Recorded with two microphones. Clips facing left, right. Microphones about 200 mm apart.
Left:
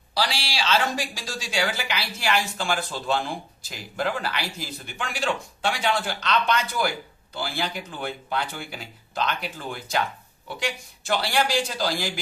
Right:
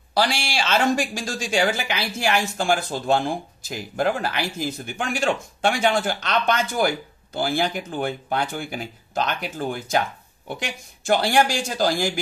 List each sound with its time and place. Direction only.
0.1 s speech: 50° right (ahead or behind)